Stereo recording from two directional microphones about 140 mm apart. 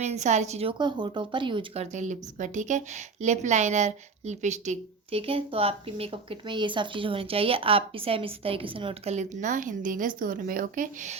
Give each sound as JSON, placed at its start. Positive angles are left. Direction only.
{"t": 0.0, "sound": "a woman's voice", "side_deg": -55}